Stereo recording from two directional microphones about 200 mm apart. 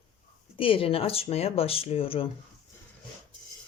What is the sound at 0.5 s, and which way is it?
Speech, 25° left (ahead or behind).